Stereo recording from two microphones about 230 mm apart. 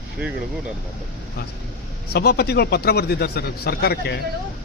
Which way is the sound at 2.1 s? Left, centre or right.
Left.